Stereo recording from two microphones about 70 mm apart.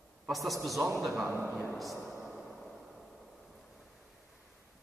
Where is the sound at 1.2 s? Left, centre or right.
Right.